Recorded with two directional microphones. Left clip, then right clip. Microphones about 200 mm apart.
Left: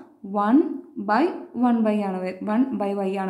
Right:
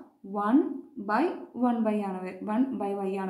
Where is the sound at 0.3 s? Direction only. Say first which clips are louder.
Left 6 dB; 25° left (ahead or behind).